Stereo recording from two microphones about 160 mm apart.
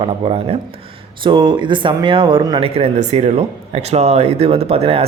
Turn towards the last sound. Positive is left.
turn(degrees=-40)  # may be behind; listen again after turning